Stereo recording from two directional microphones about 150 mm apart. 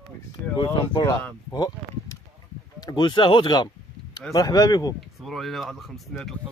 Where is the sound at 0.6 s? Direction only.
30° left (ahead or behind).